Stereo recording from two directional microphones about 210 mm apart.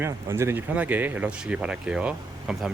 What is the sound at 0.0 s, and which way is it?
Speech, 10° right (ahead or behind).